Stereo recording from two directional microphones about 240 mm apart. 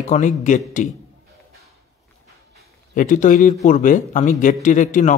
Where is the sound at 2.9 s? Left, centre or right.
Left.